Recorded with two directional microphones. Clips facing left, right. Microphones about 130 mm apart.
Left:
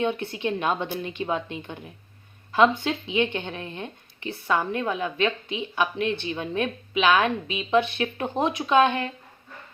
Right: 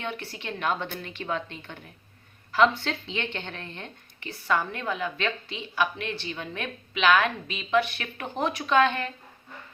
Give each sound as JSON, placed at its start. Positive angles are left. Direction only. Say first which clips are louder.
{"t": 0.0, "sound": "a woman's voice", "louder": "left 9 dB", "side_deg": 20}